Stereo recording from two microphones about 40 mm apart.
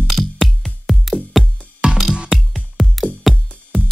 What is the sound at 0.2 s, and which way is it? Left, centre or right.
Music, centre.